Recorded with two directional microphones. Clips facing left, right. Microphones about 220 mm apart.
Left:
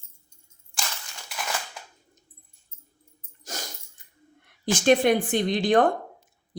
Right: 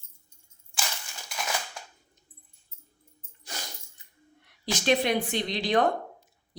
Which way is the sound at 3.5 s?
45° left (ahead or behind).